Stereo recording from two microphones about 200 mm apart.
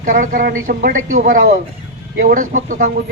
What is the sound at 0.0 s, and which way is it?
A man's voice, 40° right (ahead or behind).